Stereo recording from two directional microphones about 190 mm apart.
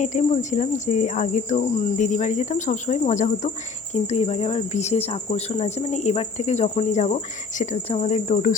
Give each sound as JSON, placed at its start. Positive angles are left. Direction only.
{"t": 0.0, "sound": "speech", "side_deg": 40}